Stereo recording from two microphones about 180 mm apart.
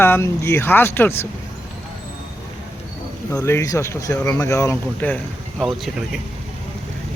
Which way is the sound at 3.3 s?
15° left (ahead or behind).